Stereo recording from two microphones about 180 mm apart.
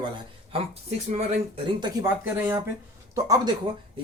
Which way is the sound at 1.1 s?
40° right (ahead or behind).